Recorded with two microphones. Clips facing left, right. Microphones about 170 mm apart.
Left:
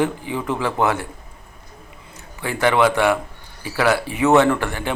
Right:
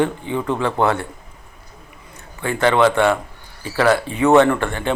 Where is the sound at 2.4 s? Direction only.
10° left (ahead or behind).